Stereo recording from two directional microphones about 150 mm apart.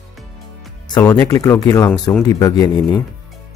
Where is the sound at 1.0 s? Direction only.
20° left (ahead or behind).